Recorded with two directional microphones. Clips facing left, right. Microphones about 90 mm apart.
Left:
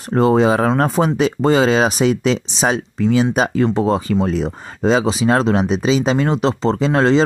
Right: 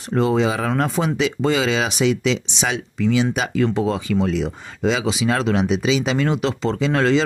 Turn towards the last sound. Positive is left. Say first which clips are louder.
# left 4 dB
turn(degrees=35)  # may be behind; listen again after turning